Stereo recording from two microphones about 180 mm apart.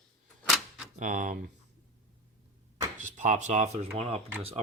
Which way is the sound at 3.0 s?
40° right (ahead or behind).